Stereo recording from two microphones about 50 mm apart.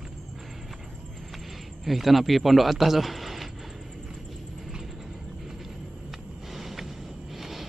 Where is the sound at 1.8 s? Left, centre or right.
Centre.